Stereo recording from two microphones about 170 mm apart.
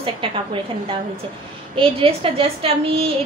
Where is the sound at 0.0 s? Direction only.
30° right (ahead or behind).